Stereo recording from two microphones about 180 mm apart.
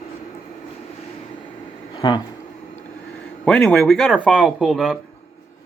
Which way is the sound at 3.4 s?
5° left (ahead or behind).